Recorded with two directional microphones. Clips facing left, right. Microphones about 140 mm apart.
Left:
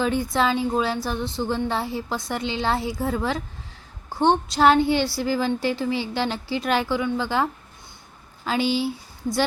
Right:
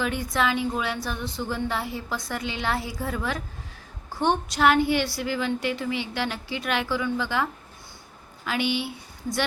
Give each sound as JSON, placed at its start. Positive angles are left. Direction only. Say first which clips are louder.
{"t": 0.0, "sound": "a woman's voice", "louder": "left 4 dB", "side_deg": 30}
{"t": 8.4, "sound": "speech", "louder": "left 4 dB", "side_deg": 30}